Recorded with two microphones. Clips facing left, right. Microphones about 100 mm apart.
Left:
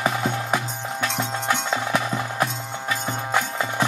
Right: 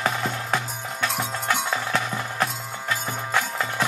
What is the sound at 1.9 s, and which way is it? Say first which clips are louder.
Music: left 2 dB; 15° left (ahead or behind).